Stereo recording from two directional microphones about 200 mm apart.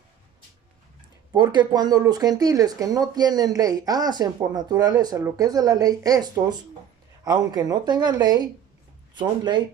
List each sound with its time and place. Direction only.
1.3 s speech: 20° right (ahead or behind)